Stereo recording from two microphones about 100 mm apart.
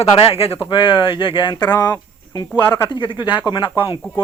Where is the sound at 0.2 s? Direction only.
70° left (ahead or behind).